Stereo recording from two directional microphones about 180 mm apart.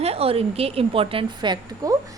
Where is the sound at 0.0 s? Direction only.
35° right (ahead or behind).